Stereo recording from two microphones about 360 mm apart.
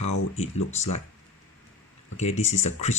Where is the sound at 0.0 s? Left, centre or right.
Left.